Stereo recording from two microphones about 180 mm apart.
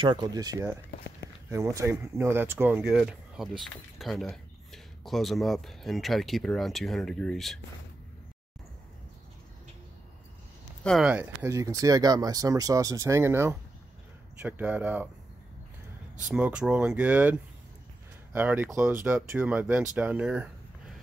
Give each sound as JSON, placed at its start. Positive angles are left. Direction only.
{"t": 0.0, "sound": "speech", "side_deg": -25}
{"t": 10.8, "sound": "speech", "side_deg": 0}
{"t": 11.4, "sound": "speech", "side_deg": -20}
{"t": 16.3, "sound": "speech", "side_deg": -5}